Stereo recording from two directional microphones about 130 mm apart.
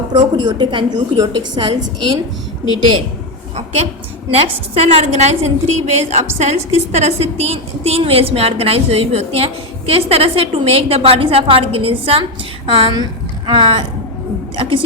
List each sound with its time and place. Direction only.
0.3 s a woman's voice: 35° right (ahead or behind)
4.4 s a woman's voice: 50° right (ahead or behind)